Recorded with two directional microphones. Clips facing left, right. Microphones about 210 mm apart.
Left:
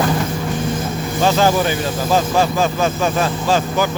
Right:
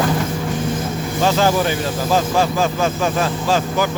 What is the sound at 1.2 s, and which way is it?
Speech, 15° left (ahead or behind).